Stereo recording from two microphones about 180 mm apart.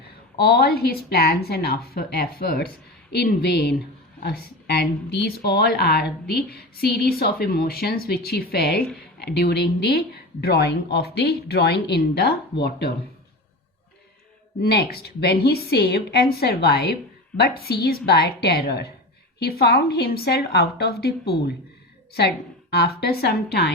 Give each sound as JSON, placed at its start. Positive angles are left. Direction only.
{"t": 0.3, "sound": "speech", "side_deg": 60}
{"t": 14.6, "sound": "speech", "side_deg": 65}
{"t": 22.7, "sound": "speech", "side_deg": 60}